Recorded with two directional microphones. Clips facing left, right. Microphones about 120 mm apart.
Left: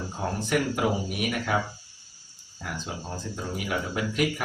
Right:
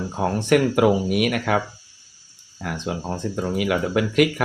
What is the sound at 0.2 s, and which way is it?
Speech, 70° right (ahead or behind).